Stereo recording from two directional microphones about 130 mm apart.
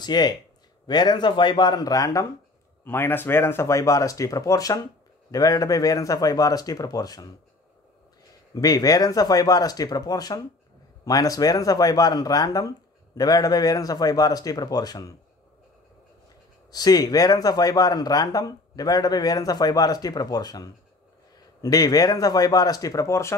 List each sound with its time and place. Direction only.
0.0 s speech: 35° left (ahead or behind)
8.5 s speech: 30° left (ahead or behind)
16.7 s speech: 30° left (ahead or behind)